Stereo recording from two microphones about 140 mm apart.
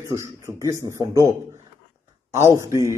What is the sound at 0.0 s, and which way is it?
A man's voice, 20° right (ahead or behind).